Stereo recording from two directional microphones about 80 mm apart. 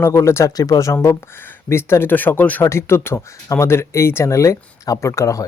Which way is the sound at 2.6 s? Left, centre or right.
Left.